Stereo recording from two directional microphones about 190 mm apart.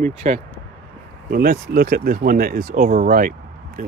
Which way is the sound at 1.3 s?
50° right (ahead or behind).